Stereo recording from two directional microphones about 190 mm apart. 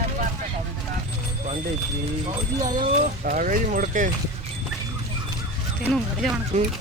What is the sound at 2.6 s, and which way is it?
Speech, 40° right (ahead or behind).